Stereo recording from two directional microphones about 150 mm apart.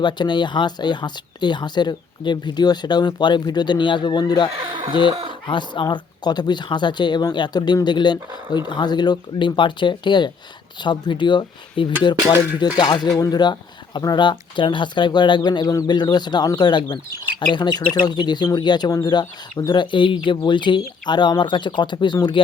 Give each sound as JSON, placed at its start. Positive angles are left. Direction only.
{"t": 0.0, "sound": "speech", "side_deg": 30}
{"t": 5.5, "sound": "speech", "side_deg": 30}